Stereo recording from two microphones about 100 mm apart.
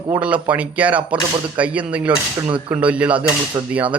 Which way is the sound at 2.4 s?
55° right (ahead or behind).